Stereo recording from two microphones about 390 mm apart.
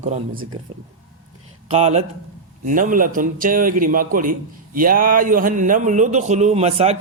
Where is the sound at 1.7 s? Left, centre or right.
Centre.